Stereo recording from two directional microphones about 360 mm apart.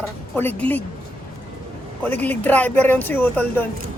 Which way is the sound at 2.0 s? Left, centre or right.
Centre.